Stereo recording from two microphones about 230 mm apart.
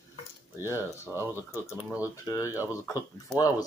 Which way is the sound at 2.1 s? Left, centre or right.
Centre.